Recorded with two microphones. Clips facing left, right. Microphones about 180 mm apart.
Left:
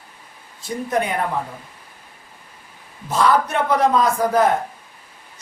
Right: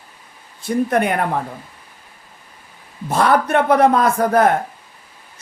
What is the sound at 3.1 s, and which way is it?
Speech, 60° right (ahead or behind).